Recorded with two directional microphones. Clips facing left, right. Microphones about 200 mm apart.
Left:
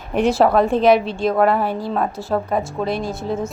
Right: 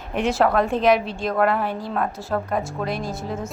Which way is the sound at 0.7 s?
30° left (ahead or behind).